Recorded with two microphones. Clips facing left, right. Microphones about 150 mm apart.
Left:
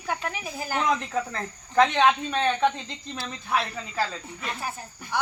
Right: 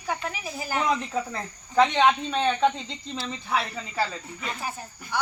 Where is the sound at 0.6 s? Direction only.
5° right (ahead or behind).